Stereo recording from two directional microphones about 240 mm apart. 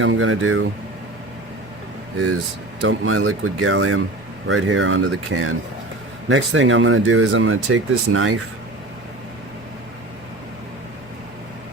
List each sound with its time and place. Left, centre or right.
0.0 s speech: right
2.8 s speech: right